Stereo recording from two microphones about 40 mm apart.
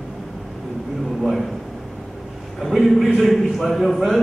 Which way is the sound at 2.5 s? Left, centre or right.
Centre.